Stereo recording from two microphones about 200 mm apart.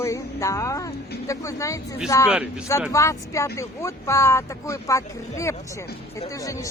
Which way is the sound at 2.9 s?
15° left (ahead or behind).